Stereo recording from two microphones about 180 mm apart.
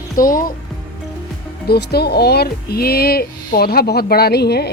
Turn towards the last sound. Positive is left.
turn(degrees=65)  # may be behind; listen again after turning